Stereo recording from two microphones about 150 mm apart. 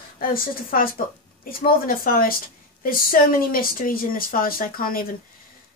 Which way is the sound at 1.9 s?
75° left (ahead or behind).